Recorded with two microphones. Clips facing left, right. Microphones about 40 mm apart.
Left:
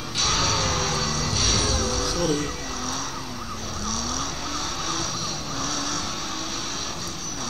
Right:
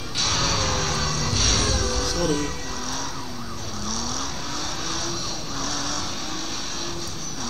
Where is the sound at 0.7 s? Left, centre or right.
Right.